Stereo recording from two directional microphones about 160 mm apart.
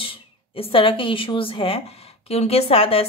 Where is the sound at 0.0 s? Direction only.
35° left (ahead or behind).